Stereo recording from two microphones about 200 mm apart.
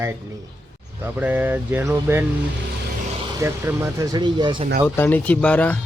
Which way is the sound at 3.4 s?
10° right (ahead or behind).